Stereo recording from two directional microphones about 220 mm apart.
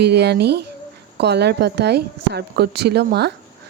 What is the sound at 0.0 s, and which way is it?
Speech, 50° right (ahead or behind).